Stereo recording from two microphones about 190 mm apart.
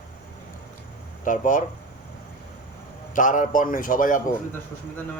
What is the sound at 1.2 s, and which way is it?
Speech, 45° left (ahead or behind).